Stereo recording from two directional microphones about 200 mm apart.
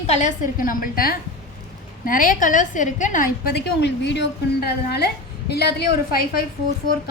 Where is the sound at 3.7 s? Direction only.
60° left (ahead or behind).